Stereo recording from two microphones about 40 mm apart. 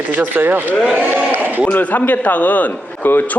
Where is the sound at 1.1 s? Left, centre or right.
Right.